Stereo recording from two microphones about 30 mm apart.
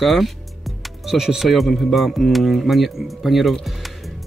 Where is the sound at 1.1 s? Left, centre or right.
Centre.